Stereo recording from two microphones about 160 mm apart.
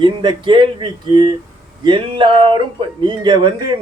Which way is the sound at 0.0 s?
30° right (ahead or behind).